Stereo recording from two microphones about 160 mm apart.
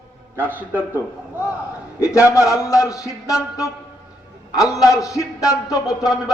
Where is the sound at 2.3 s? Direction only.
20° left (ahead or behind).